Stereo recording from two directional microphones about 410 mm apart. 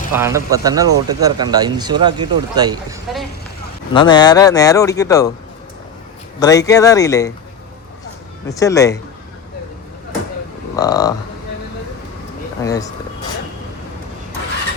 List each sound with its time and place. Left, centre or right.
0.1 s speech: centre
3.9 s speech: centre
6.4 s speech: centre
8.4 s speech: centre
10.8 s speech: centre
12.6 s speech: centre